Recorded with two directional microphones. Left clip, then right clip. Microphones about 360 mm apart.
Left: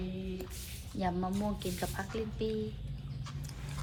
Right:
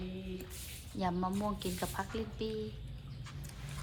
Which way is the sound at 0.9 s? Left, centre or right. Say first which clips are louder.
Left 1 dB; centre.